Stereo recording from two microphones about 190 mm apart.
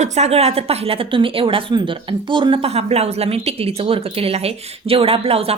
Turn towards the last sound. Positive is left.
turn(degrees=-30)  # may be behind; listen again after turning